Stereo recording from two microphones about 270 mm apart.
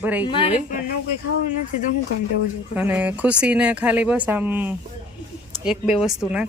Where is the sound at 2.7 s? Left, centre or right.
Centre.